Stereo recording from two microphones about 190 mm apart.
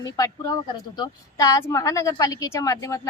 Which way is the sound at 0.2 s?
20° left (ahead or behind).